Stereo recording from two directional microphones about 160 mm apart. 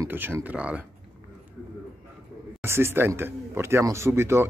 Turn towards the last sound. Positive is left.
turn(degrees=-15)  # may be behind; listen again after turning